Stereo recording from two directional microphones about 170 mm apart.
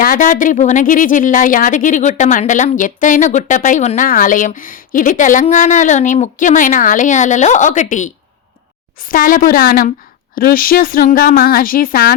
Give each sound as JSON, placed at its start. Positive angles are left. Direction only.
{"t": 0.0, "sound": "speech", "side_deg": 50}